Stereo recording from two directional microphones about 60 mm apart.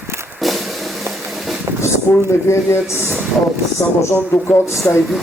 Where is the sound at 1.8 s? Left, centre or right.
Left.